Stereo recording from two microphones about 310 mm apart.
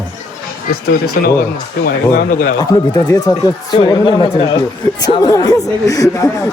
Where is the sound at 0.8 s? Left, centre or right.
Left.